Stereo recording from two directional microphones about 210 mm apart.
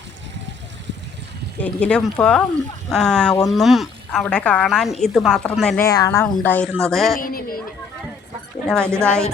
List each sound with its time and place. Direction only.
1.6 s speech: 5° left (ahead or behind)
7.2 s a woman's voice: 45° left (ahead or behind)
8.6 s speech: 5° left (ahead or behind)